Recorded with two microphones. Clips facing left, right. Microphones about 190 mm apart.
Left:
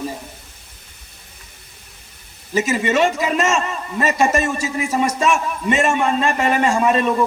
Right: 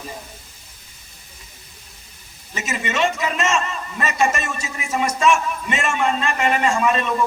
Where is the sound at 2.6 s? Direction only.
40° left (ahead or behind).